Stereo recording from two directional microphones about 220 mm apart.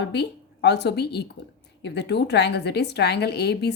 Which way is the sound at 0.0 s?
50° left (ahead or behind).